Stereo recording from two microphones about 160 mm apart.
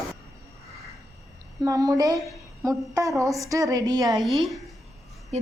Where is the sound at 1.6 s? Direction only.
20° right (ahead or behind).